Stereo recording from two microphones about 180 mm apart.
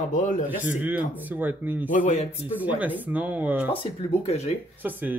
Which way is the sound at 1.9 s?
45° left (ahead or behind).